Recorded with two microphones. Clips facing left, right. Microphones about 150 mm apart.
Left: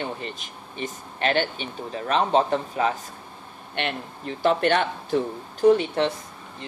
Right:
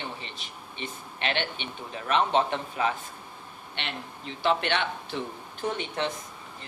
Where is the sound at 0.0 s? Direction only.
45° left (ahead or behind).